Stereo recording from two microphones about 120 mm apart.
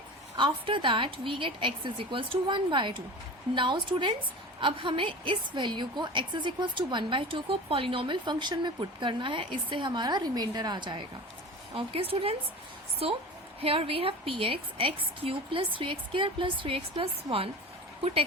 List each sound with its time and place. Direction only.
0.3 s a woman's voice: 45° right (ahead or behind)
11.7 s a woman's voice: 50° right (ahead or behind)
13.6 s a woman's voice: 50° right (ahead or behind)